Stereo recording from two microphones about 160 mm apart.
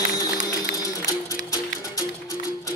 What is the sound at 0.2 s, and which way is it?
Music, 20° left (ahead or behind).